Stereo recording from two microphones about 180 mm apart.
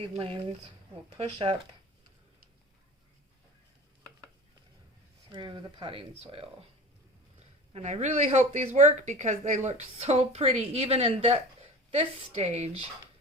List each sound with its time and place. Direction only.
0.0 s speech: 30° right (ahead or behind)
5.3 s speech: 25° right (ahead or behind)